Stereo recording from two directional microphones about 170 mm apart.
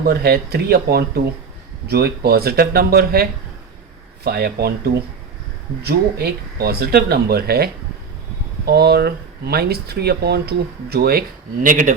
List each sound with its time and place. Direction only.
0.0 s speech: 70° right (ahead or behind)
5.8 s speech: 70° right (ahead or behind)
11.6 s speech: 50° right (ahead or behind)